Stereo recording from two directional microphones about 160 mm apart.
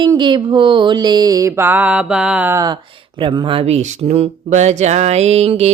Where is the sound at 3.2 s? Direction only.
30° right (ahead or behind).